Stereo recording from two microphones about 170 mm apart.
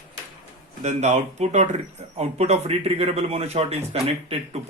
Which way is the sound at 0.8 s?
40° right (ahead or behind).